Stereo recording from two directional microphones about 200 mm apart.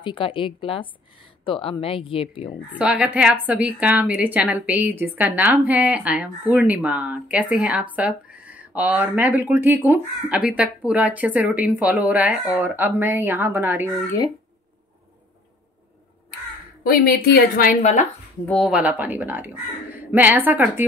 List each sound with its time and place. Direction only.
0.0 s speech: 25° left (ahead or behind)
2.7 s speech: 5° right (ahead or behind)
16.8 s a woman's voice: 45° left (ahead or behind)
18.5 s speech: centre (ahead or behind)